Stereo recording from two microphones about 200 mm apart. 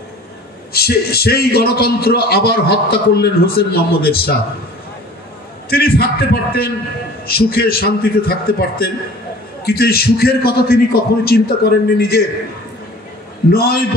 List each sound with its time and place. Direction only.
0.7 s a man's voice: 50° left (ahead or behind)
5.7 s a man's voice: 50° left (ahead or behind)
13.5 s a man's voice: 50° left (ahead or behind)